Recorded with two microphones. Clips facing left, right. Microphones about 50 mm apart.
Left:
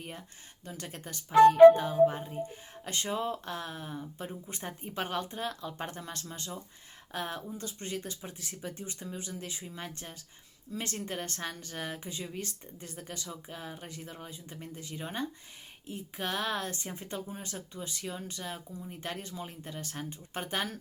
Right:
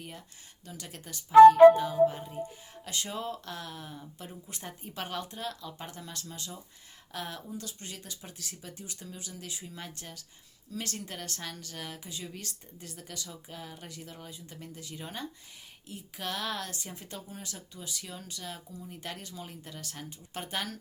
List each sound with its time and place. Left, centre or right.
0.6 s a woman's voice: left